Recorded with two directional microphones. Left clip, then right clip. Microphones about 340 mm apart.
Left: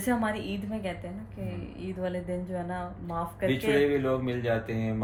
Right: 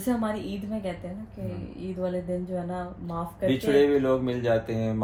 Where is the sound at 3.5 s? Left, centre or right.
Centre.